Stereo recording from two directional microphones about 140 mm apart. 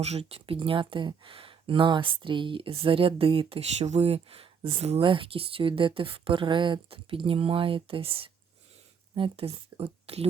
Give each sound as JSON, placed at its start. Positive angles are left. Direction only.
{"t": 0.0, "sound": "speech", "side_deg": -50}